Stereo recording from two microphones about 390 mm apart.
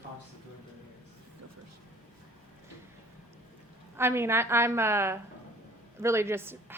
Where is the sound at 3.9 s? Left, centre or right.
Centre.